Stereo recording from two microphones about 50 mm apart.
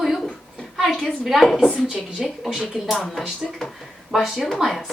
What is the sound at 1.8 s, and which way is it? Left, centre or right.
Speech, centre.